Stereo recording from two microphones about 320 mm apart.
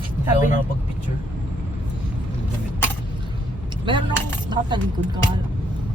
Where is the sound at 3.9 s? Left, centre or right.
Centre.